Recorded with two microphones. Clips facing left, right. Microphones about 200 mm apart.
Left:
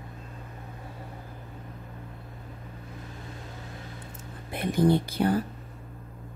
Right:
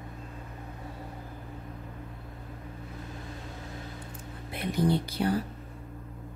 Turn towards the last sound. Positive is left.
turn(degrees=50)  # may be behind; listen again after turning